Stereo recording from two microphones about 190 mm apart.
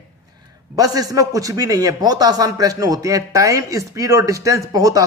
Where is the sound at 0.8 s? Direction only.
20° right (ahead or behind).